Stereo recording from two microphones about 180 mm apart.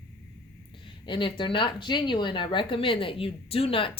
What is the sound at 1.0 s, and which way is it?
A woman's voice, 30° left (ahead or behind).